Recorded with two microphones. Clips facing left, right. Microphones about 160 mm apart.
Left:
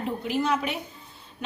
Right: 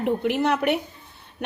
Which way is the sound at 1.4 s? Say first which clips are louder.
Right 3 dB; 65° right (ahead or behind).